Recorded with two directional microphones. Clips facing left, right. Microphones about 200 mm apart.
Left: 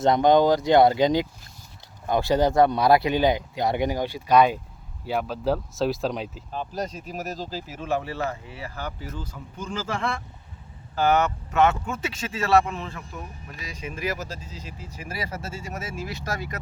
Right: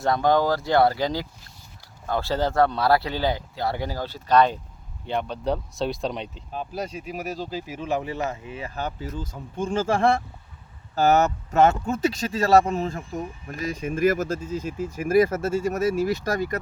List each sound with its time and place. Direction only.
0.0 s speech: 20° left (ahead or behind); by 10.0 s 30° right (ahead or behind)
10.9 s speech: 40° right (ahead or behind)